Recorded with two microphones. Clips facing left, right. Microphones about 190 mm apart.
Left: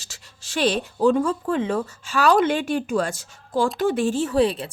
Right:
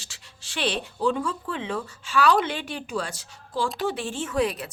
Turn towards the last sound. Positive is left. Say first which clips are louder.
# left 5 dB
turn(degrees=30)  # may be behind; listen again after turning